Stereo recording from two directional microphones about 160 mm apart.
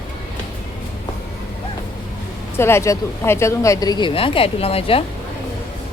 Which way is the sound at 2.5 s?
15° left (ahead or behind).